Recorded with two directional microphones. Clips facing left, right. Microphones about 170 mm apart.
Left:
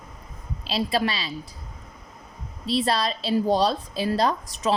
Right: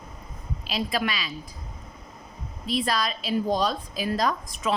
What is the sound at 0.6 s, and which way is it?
Speech, 30° left (ahead or behind).